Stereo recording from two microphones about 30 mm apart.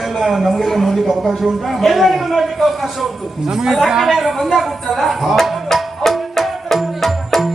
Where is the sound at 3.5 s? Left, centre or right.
Centre.